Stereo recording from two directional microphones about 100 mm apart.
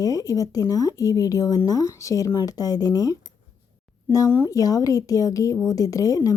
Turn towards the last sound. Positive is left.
turn(degrees=35)  # may be behind; listen again after turning